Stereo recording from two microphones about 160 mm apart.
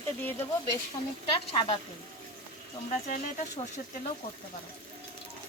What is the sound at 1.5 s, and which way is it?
Speech, 35° left (ahead or behind).